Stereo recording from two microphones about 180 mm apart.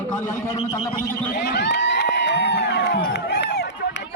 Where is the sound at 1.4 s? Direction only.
70° left (ahead or behind).